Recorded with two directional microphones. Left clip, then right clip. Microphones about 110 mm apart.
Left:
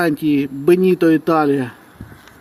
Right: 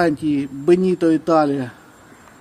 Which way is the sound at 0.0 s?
5° left (ahead or behind).